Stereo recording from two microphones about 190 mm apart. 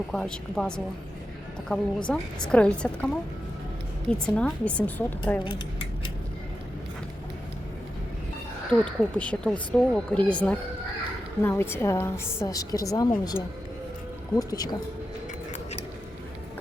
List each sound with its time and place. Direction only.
0.1 s a woman's voice: centre (ahead or behind)
4.1 s a woman's voice: 5° left (ahead or behind)
8.8 s a woman's voice: 5° left (ahead or behind)